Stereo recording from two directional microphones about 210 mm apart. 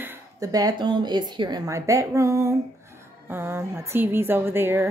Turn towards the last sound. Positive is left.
turn(degrees=-10)  # may be behind; listen again after turning